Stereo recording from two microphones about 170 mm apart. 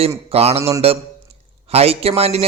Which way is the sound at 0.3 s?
35° right (ahead or behind).